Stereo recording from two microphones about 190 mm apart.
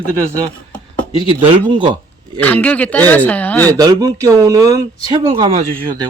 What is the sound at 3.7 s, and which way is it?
Speech, 20° right (ahead or behind).